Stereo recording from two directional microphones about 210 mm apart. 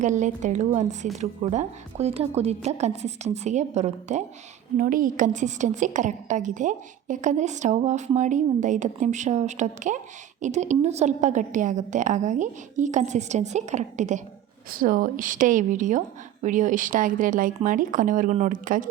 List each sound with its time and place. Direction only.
0.0 s a woman's voice: 35° right (ahead or behind)